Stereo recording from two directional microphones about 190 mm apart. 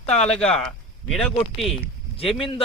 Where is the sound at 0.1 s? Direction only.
5° left (ahead or behind).